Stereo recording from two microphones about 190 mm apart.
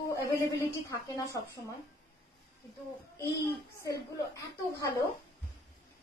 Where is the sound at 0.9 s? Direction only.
15° left (ahead or behind).